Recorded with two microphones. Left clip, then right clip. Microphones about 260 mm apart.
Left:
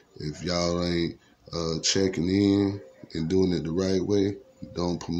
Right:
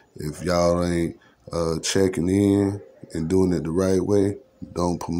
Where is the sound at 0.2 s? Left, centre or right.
Centre.